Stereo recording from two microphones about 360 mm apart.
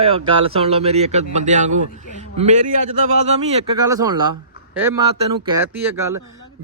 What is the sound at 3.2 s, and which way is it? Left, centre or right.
A man's voice, centre.